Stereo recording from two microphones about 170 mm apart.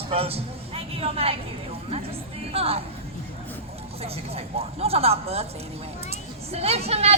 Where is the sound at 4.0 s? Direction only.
35° right (ahead or behind).